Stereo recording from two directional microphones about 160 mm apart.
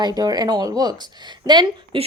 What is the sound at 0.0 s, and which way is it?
A woman's voice, 25° right (ahead or behind).